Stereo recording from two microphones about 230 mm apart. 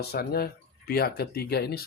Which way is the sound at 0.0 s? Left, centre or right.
Left.